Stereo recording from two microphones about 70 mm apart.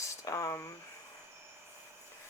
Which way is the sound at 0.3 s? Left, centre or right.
Left.